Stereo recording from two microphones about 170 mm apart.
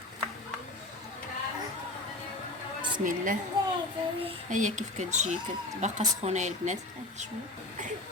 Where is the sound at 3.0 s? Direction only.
50° right (ahead or behind).